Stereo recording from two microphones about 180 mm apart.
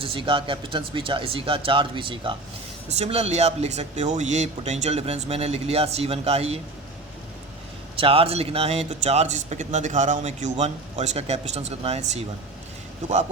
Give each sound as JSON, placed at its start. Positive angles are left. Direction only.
{"t": 0.0, "sound": "speech", "side_deg": -30}
{"t": 7.9, "sound": "speech", "side_deg": -30}